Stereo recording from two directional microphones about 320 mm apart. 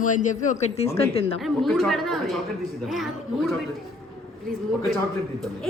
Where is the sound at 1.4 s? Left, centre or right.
Centre.